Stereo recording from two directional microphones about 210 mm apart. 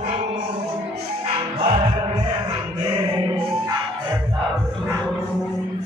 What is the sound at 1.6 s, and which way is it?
Music, 25° right (ahead or behind).